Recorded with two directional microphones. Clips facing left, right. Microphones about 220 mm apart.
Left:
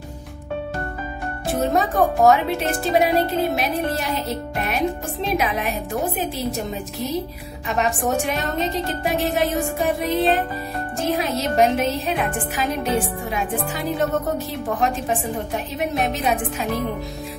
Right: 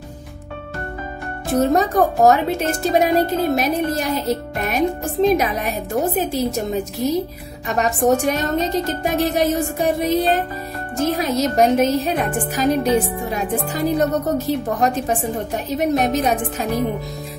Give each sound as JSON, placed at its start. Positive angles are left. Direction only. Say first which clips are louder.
{"t": 1.5, "sound": "a woman's voice", "louder": "right 4 dB", "side_deg": -40}